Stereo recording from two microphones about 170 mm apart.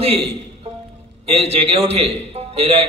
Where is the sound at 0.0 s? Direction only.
35° right (ahead or behind).